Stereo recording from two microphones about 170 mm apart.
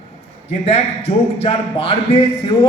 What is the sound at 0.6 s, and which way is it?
A man's voice, 35° left (ahead or behind).